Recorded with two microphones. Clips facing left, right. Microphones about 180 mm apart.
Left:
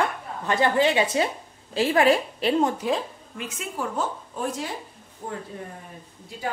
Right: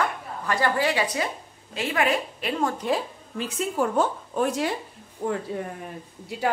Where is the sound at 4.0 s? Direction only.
70° right (ahead or behind).